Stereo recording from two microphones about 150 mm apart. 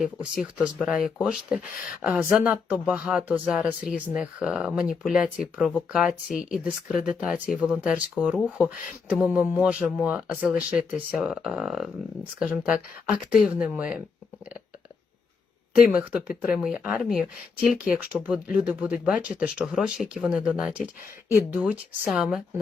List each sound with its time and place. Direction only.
0.0 s speech: 5° right (ahead or behind)
15.9 s speech: 5° right (ahead or behind)